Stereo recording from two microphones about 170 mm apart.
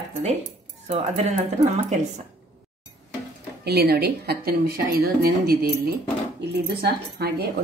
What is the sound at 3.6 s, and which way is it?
A woman's voice, 70° right (ahead or behind).